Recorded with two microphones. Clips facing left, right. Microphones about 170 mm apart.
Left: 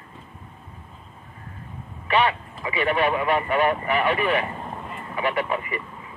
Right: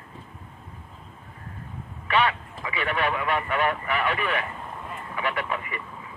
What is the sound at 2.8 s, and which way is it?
Speech, 30° left (ahead or behind).